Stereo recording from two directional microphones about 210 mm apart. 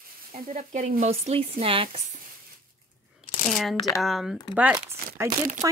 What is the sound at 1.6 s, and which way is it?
Speech, 25° right (ahead or behind).